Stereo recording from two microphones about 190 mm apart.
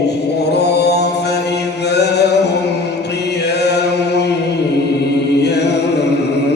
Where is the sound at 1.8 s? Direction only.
60° left (ahead or behind).